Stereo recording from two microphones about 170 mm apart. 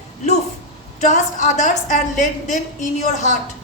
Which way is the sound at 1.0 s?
45° left (ahead or behind).